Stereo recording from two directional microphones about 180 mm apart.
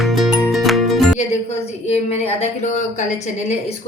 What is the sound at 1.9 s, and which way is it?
A woman's voice, 35° left (ahead or behind).